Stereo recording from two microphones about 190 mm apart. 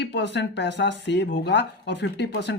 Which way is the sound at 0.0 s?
65° left (ahead or behind).